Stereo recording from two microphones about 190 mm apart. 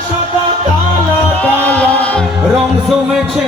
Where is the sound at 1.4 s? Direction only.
10° left (ahead or behind).